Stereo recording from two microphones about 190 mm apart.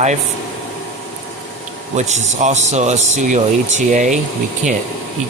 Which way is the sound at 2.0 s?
40° right (ahead or behind).